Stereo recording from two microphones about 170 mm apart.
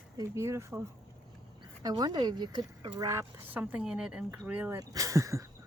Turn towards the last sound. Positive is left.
turn(degrees=-20)  # may be behind; listen again after turning